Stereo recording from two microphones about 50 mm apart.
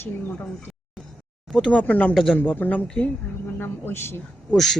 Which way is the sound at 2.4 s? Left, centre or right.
Left.